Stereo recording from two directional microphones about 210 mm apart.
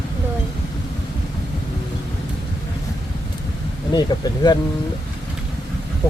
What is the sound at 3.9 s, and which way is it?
Speech, 20° left (ahead or behind).